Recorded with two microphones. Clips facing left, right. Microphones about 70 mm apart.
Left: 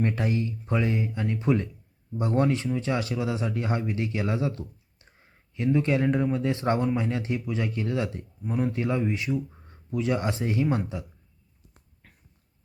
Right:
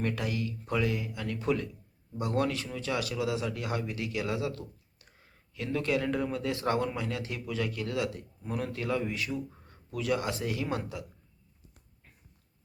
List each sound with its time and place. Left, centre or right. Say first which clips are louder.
0.0 s speech: left 5 dB; left